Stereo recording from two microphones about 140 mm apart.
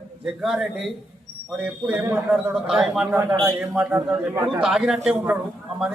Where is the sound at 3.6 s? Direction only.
10° right (ahead or behind).